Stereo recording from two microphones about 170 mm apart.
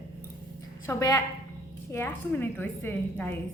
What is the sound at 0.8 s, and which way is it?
A woman's voice, 20° left (ahead or behind).